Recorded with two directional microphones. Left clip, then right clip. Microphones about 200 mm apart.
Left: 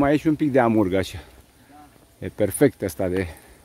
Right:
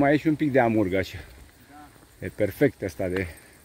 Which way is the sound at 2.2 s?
25° left (ahead or behind).